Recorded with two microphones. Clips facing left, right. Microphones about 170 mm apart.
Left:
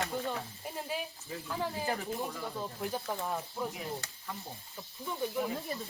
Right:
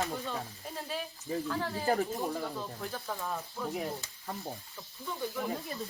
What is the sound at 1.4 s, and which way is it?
Speech, 15° left (ahead or behind).